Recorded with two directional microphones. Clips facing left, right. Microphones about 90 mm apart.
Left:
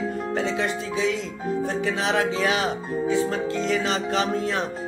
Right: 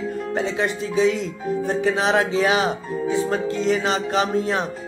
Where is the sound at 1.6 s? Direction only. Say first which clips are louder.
Right 6 dB; 25° right (ahead or behind).